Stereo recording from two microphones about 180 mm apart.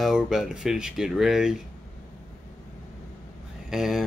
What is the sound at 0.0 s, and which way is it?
Speech, centre (ahead or behind).